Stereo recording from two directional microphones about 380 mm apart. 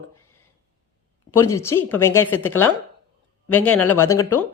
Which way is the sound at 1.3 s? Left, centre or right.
Centre.